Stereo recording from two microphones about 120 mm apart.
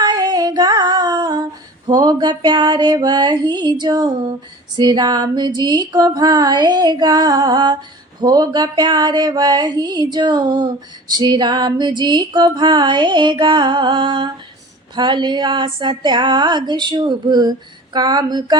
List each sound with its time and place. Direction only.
0.0 s music: 35° right (ahead or behind)
1.9 s female singing: 35° right (ahead or behind)